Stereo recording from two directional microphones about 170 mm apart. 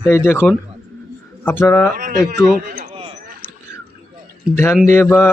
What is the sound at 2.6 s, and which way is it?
Run, 55° right (ahead or behind).